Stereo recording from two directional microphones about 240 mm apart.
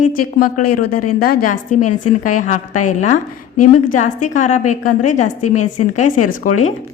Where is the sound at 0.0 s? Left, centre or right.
Left.